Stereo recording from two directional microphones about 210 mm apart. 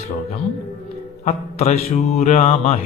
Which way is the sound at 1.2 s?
30° left (ahead or behind).